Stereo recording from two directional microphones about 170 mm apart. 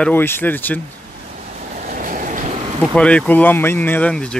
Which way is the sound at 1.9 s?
50° right (ahead or behind).